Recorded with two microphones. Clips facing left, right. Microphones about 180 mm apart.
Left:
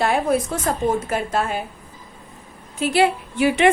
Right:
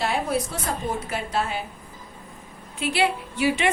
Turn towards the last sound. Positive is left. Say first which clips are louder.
# left 6 dB
turn(degrees=50)  # may be behind; listen again after turning